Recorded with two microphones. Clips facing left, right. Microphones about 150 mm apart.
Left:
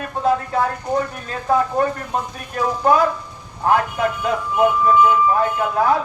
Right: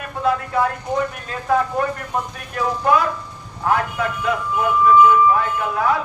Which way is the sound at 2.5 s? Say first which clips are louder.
Left 1 dB; 35° left (ahead or behind).